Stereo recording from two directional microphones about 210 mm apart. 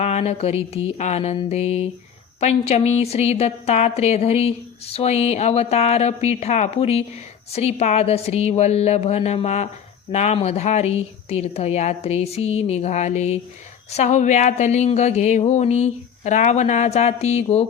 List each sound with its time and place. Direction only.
0.0 s music: 30° left (ahead or behind)
2.4 s a woman's voice: 30° left (ahead or behind)